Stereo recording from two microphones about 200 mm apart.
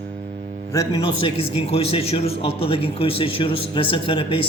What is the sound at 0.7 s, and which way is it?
A man's voice, 20° left (ahead or behind).